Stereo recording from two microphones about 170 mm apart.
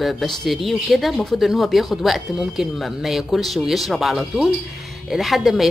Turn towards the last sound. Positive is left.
turn(degrees=0)  # may be behind; listen again after turning